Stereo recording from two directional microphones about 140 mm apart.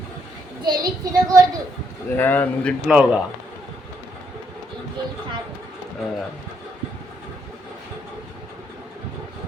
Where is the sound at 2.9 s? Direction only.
10° right (ahead or behind).